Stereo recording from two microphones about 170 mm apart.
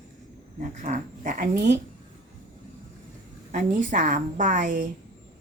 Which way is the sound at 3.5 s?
50° right (ahead or behind).